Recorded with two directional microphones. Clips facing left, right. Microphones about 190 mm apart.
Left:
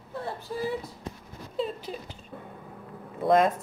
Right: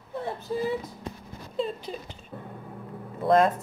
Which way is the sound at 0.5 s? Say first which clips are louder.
Right 4 dB; 20° right (ahead or behind).